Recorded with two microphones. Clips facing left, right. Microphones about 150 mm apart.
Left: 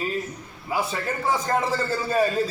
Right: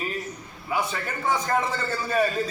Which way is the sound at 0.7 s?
30° left (ahead or behind).